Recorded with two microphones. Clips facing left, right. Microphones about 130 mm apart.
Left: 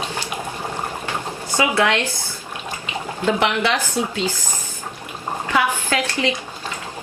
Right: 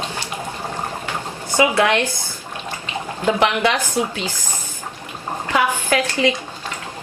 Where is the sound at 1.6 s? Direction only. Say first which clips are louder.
Right 3 dB; 15° right (ahead or behind).